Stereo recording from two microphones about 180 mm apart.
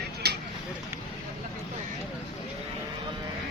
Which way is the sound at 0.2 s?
65° right (ahead or behind).